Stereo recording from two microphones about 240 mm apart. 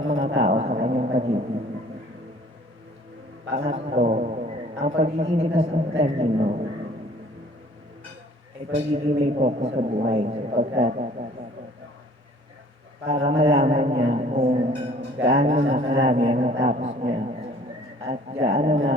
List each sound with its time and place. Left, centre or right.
0.0 s a sound: right
3.5 s a man's voice: right
8.7 s a man's voice: right
13.1 s a man's voice: right
18.0 s a sound: right
18.4 s a man's voice: right